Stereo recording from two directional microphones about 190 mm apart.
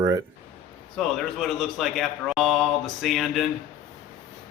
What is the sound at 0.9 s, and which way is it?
Speech, centre (ahead or behind).